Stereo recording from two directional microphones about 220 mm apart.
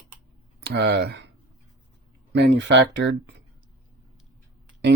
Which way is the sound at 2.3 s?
50° right (ahead or behind).